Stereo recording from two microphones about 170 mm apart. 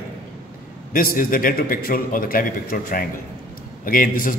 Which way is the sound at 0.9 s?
55° left (ahead or behind).